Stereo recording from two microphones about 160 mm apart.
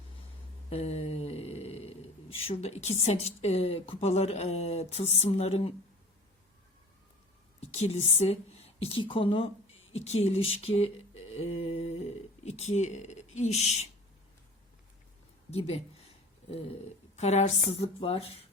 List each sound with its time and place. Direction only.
0.7 s speech: 40° left (ahead or behind)
7.6 s a woman's voice: 45° left (ahead or behind)
10.0 s mantra: 40° left (ahead or behind)
15.4 s speech: 40° left (ahead or behind)
17.2 s a woman's voice: 45° left (ahead or behind)